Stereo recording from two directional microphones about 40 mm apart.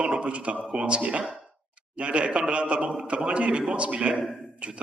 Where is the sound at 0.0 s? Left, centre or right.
Right.